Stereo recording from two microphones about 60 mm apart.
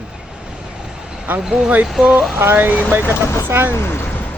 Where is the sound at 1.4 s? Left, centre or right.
Centre.